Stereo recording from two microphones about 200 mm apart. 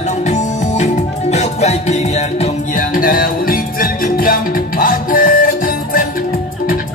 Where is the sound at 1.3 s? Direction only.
35° left (ahead or behind).